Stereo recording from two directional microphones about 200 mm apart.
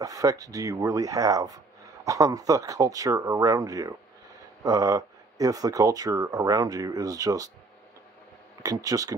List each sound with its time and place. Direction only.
0.0 s speech: 15° right (ahead or behind)
8.6 s speech: 15° right (ahead or behind)